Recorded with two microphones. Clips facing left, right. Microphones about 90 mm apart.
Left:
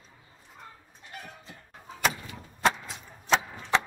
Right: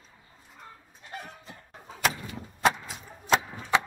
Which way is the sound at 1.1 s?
30° right (ahead or behind).